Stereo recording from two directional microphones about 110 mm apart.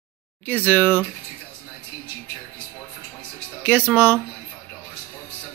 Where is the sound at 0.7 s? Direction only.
15° left (ahead or behind).